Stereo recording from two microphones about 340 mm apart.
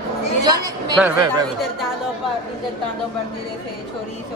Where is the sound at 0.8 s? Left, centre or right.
Centre.